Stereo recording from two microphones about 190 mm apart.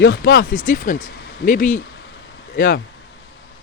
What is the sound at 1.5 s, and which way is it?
Speech, 45° left (ahead or behind).